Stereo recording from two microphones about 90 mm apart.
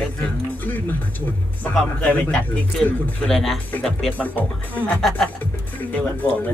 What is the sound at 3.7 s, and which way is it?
Speech, 15° left (ahead or behind).